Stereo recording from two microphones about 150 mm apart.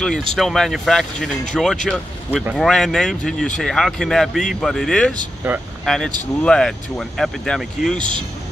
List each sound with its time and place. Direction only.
0.0 s speech: centre (ahead or behind)
5.4 s speech: 15° right (ahead or behind)
5.9 s speech: 5° left (ahead or behind)